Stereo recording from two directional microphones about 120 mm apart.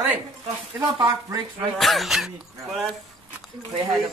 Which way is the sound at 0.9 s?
35° right (ahead or behind).